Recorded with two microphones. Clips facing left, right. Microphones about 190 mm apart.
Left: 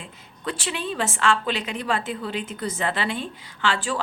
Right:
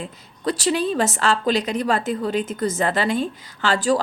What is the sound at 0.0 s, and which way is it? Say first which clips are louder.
A woman's voice: right 7 dB; 40° right (ahead or behind).